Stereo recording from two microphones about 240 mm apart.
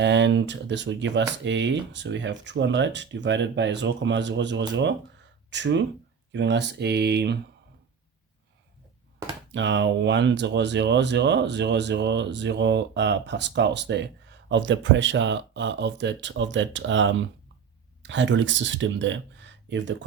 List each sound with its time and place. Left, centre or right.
0.0 s speech: right
9.5 s speech: right